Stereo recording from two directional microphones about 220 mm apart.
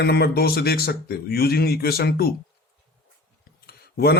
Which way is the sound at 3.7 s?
45° left (ahead or behind).